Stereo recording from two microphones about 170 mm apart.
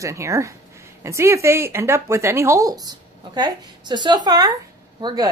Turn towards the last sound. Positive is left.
turn(degrees=-25)  # may be behind; listen again after turning